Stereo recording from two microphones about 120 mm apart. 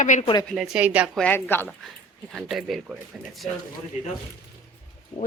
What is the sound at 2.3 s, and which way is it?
Speech, centre (ahead or behind).